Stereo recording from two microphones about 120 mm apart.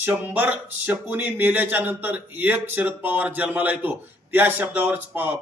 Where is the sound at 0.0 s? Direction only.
15° right (ahead or behind).